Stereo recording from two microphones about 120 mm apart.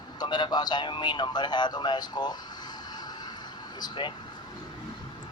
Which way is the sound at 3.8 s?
35° left (ahead or behind).